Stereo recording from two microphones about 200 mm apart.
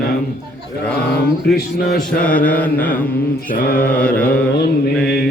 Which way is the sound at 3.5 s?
45° left (ahead or behind).